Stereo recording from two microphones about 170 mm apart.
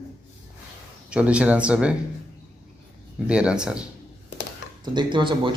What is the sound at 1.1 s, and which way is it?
Speech, 5° right (ahead or behind).